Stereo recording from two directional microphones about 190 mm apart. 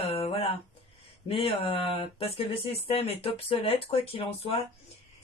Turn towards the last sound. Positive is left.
turn(degrees=30)  # may be behind; listen again after turning